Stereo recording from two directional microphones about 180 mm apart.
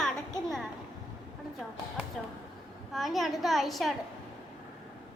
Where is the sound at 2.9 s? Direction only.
Centre (ahead or behind).